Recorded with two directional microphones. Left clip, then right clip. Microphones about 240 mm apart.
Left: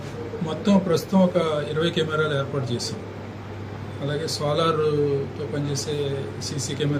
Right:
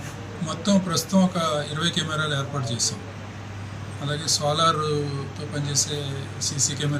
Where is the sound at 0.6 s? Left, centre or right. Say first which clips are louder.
Left 3 dB; centre.